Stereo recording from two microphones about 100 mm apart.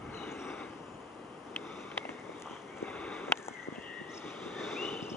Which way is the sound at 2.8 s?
10° left (ahead or behind).